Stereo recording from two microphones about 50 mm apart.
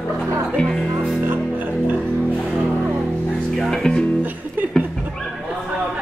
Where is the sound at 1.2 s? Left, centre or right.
Right.